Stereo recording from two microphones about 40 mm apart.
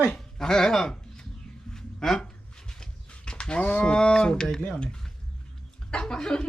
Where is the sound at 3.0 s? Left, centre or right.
Left.